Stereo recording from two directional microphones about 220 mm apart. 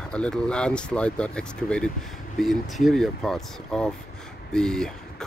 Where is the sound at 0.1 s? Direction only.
5° left (ahead or behind).